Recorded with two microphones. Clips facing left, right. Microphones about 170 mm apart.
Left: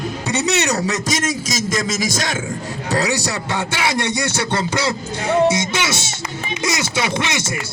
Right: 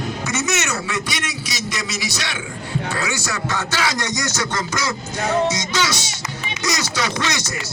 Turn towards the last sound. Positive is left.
turn(degrees=25)  # may be behind; listen again after turning